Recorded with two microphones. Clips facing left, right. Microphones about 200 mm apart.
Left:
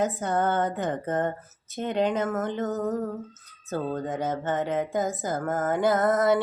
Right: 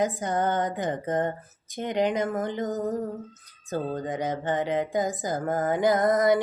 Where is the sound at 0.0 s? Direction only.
15° right (ahead or behind).